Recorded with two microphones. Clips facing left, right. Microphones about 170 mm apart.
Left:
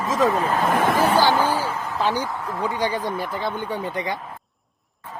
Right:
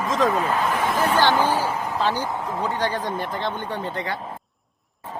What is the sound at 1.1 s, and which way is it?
Speech, 10° left (ahead or behind).